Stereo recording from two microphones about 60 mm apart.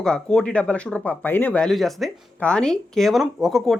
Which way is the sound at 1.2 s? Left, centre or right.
Left.